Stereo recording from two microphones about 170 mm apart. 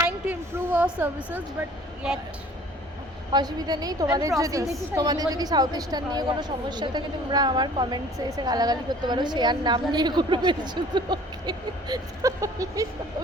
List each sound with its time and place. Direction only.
0.3 s a woman's voice: 10° right (ahead or behind)
3.3 s a woman's voice: 25° right (ahead or behind)